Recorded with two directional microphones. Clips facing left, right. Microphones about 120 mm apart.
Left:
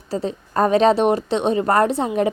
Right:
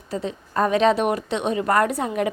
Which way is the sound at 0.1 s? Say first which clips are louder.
Left 3 dB; 35° left (ahead or behind).